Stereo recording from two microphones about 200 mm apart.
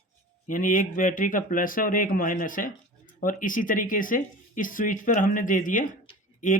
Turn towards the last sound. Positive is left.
turn(degrees=40)  # may be behind; listen again after turning